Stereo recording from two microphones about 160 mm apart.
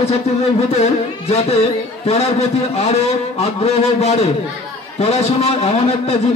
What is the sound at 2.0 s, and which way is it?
A man's voice, 40° left (ahead or behind).